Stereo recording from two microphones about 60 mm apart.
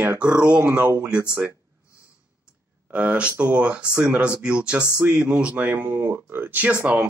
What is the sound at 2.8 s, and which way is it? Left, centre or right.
Speech, right.